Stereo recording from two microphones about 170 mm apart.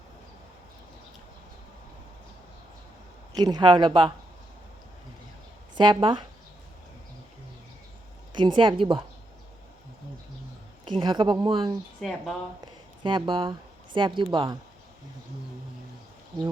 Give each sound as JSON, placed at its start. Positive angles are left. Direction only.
{"t": 3.3, "sound": "speech", "side_deg": -25}
{"t": 5.7, "sound": "speech", "side_deg": -25}
{"t": 8.4, "sound": "speech", "side_deg": -30}
{"t": 10.8, "sound": "speech", "side_deg": -30}
{"t": 11.9, "sound": "speech", "side_deg": 0}
{"t": 13.0, "sound": "speech", "side_deg": -30}